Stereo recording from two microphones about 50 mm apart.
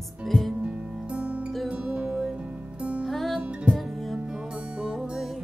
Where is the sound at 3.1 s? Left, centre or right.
Centre.